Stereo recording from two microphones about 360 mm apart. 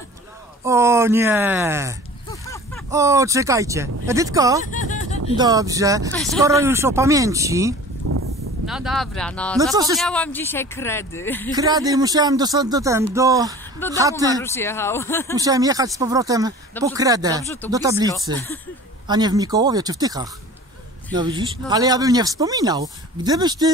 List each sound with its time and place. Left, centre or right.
0.7 s speech: centre
2.4 s a sound: centre
2.9 s speech: centre
4.6 s a sound: left
5.4 s speech: centre
8.1 s a sound: right
8.6 s speech: centre
9.6 s speech: centre
9.9 s speech: centre
11.5 s speech: centre
13.8 s speech: centre
15.3 s speech: centre